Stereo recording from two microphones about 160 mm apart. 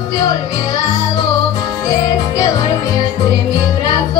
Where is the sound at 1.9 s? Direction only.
25° left (ahead or behind).